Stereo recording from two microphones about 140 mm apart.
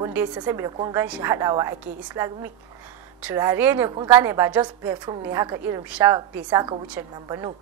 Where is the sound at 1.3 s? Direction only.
25° right (ahead or behind).